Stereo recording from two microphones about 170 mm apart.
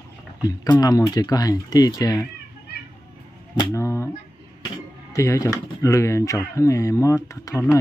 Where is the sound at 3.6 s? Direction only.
15° left (ahead or behind).